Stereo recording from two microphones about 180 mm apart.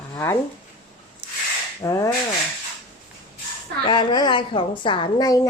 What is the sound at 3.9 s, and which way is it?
A woman's voice, 25° left (ahead or behind).